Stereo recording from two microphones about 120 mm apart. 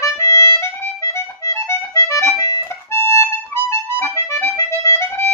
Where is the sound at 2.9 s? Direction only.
25° left (ahead or behind).